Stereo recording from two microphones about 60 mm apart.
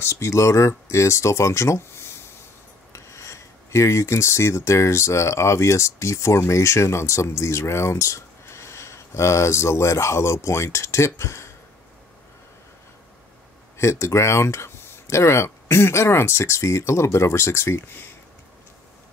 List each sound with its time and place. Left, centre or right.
0.0 s speech: left
13.7 s speech: left